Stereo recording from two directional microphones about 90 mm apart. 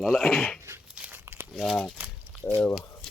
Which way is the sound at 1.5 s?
Centre (ahead or behind).